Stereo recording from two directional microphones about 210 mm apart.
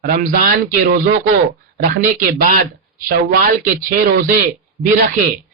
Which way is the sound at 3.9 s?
40° right (ahead or behind).